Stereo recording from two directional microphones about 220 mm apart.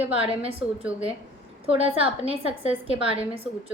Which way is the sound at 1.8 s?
25° right (ahead or behind).